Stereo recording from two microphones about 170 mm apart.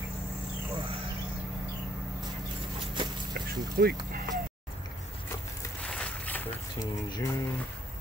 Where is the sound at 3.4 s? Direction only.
60° right (ahead or behind).